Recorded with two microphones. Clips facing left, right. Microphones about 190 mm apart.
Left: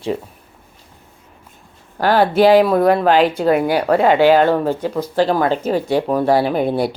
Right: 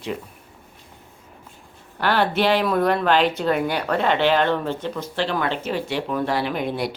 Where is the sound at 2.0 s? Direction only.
40° left (ahead or behind).